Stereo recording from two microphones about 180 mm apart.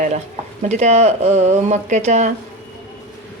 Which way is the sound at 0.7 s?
40° right (ahead or behind).